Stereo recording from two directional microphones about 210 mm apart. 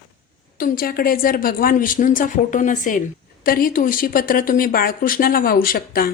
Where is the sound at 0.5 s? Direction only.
45° left (ahead or behind).